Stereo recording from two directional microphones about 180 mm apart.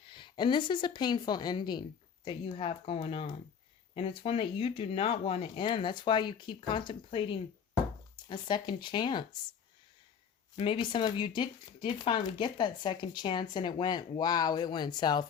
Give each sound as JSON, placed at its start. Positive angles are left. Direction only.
{"t": 0.1, "sound": "speech", "side_deg": 25}
{"t": 10.6, "sound": "speech", "side_deg": 30}